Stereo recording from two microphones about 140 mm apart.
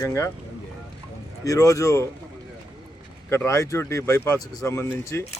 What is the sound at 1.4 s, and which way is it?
Speech, 25° left (ahead or behind).